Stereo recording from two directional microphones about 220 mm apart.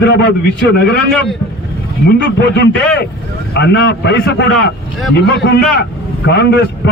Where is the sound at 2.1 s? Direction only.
50° left (ahead or behind).